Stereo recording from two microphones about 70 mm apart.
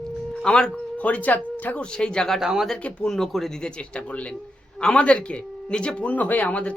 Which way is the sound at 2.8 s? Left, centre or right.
Centre.